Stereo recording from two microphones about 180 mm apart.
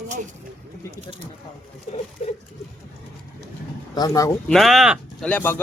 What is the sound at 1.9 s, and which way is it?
Speech, 40° left (ahead or behind).